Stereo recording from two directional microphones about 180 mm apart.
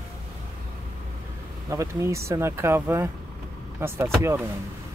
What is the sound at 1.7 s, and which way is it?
Speech, 15° right (ahead or behind).